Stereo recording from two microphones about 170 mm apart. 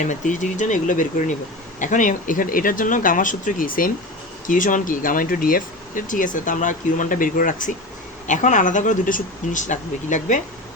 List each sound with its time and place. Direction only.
0.0 s speech: 45° left (ahead or behind)